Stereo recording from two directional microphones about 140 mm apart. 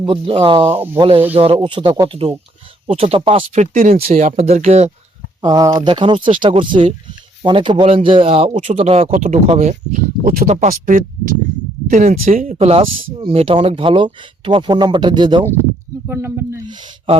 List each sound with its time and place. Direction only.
0.0 s speech: 40° right (ahead or behind)
3.9 s speech: 50° right (ahead or behind)
5.4 s speech: 25° right (ahead or behind)
5.9 s speech: 35° right (ahead or behind)
9.2 s speech: 60° right (ahead or behind); by 11.3 s 80° right
11.9 s speech: 60° right (ahead or behind); by 12.5 s 75° right (ahead or behind)
12.5 s speech: 45° right (ahead or behind)
16.0 s speech: 15° right (ahead or behind)
16.6 s speech: 35° right (ahead or behind)